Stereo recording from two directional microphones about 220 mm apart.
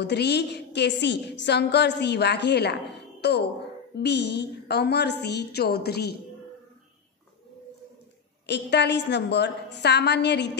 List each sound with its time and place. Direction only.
0.0 s a woman's voice: 50° left (ahead or behind)
8.5 s a woman's voice: 50° left (ahead or behind)